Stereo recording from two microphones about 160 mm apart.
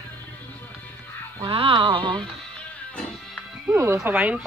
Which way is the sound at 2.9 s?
5° left (ahead or behind).